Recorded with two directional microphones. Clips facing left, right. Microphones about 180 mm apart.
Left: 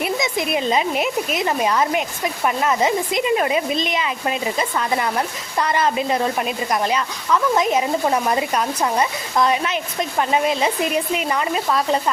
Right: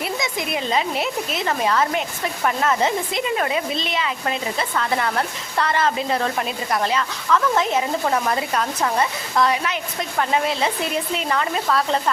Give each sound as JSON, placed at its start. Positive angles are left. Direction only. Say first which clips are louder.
{"t": 0.0, "sound": "speech", "louder": "left 4 dB", "side_deg": 20}